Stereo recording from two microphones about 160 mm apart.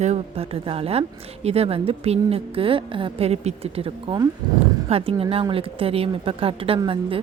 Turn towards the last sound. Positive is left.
turn(degrees=-30)  # may be behind; listen again after turning